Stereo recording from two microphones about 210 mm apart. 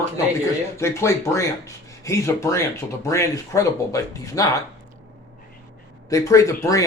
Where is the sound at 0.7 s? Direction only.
15° left (ahead or behind).